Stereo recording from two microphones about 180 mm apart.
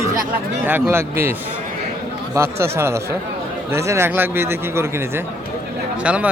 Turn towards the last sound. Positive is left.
turn(degrees=-5)  # may be behind; listen again after turning